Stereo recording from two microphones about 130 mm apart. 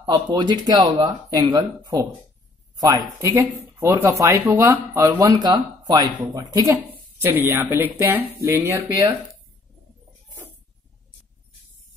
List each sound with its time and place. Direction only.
0.1 s speech: 35° right (ahead or behind)
3.3 s speech: 20° right (ahead or behind)
7.2 s speech: 15° right (ahead or behind)